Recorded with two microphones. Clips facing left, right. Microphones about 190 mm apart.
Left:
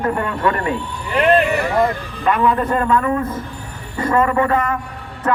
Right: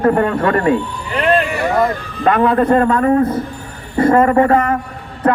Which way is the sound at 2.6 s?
40° right (ahead or behind).